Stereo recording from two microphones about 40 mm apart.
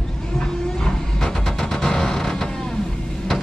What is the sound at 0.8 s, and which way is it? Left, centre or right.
Vehicle, centre.